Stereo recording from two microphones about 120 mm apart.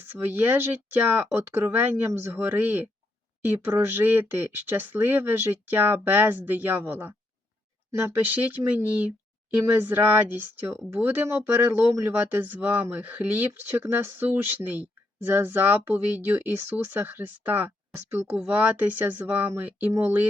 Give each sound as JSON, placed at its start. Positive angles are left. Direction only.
{"t": 0.0, "sound": "speech", "side_deg": -15}